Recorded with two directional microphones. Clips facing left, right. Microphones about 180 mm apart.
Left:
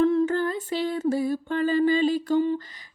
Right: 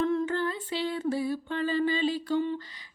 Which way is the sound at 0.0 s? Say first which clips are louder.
Left 6 dB; 40° left (ahead or behind).